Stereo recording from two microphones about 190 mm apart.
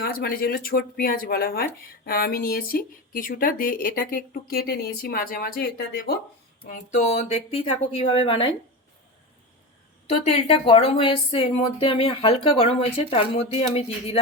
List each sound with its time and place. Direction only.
0.0 s speech: 50° left (ahead or behind)
6.7 s speech: 35° left (ahead or behind)
10.1 s a woman's voice: 35° left (ahead or behind)